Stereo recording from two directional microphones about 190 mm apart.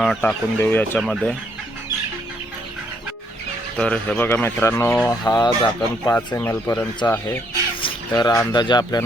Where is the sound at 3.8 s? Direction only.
5° left (ahead or behind).